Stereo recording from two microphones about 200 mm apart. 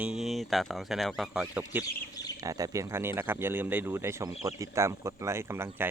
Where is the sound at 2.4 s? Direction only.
15° right (ahead or behind).